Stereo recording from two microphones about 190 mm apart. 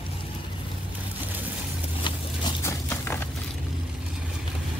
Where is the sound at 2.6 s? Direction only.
15° left (ahead or behind).